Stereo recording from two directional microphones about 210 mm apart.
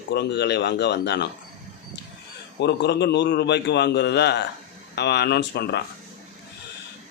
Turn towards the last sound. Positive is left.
turn(degrees=50)  # may be behind; listen again after turning